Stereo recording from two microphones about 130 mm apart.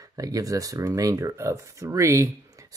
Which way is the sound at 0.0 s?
25° right (ahead or behind).